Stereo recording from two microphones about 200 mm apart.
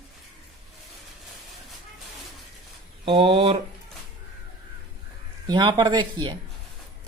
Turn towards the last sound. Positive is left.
turn(degrees=-20)  # may be behind; listen again after turning